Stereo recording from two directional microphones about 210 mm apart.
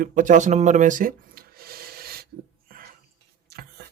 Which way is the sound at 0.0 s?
40° right (ahead or behind).